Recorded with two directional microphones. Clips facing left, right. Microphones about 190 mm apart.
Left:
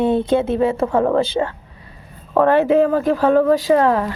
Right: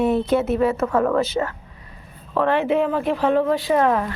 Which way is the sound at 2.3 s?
40° left (ahead or behind).